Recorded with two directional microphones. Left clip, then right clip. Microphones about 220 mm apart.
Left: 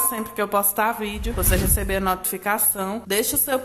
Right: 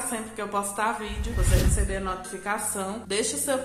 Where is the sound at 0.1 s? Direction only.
35° left (ahead or behind).